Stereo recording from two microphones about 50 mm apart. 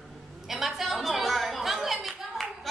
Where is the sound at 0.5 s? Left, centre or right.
Centre.